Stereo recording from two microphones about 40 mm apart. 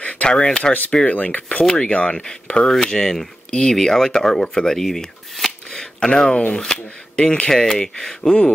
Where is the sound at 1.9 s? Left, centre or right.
Left.